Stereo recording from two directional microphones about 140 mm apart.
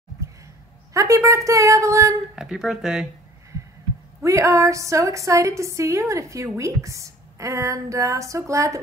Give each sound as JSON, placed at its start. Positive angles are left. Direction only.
{"t": 0.9, "sound": "a woman's voice", "side_deg": -20}
{"t": 2.3, "sound": "speech", "side_deg": -5}
{"t": 4.2, "sound": "a woman's voice", "side_deg": -20}